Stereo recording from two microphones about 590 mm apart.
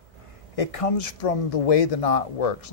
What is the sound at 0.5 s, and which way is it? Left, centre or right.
Speech, left.